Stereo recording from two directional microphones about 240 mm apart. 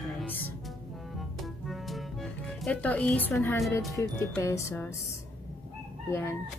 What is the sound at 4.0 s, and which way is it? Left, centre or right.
Speech, centre.